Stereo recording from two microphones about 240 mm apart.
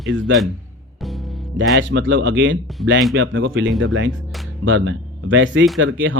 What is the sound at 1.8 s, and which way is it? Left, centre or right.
Speech, right.